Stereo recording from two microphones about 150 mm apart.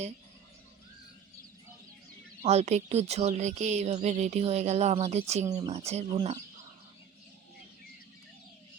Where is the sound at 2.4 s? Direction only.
45° right (ahead or behind).